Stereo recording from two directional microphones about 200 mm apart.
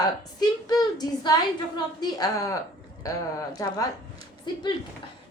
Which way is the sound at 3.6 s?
20° left (ahead or behind).